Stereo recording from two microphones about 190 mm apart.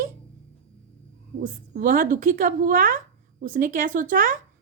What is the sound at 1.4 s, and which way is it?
Speech, 45° right (ahead or behind).